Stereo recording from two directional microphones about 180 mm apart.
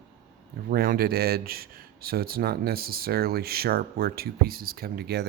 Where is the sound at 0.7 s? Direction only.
55° right (ahead or behind).